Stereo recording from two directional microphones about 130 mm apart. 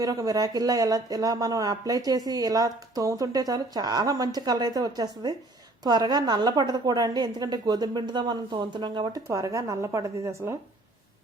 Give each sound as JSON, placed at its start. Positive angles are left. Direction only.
{"t": 0.0, "sound": "a woman's voice", "side_deg": -30}